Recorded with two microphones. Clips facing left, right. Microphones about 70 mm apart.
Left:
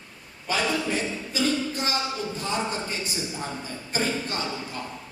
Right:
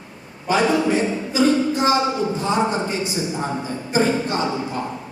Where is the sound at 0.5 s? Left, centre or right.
Right.